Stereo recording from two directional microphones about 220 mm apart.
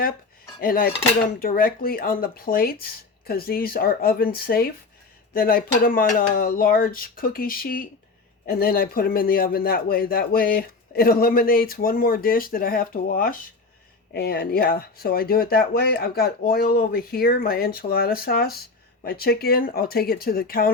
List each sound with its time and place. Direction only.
0.6 s a man's voice: 40° left (ahead or behind)